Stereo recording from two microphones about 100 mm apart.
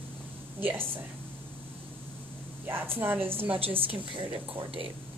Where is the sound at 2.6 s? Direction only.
20° right (ahead or behind).